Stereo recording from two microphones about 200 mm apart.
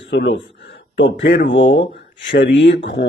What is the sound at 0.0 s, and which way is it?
Speech, 65° left (ahead or behind).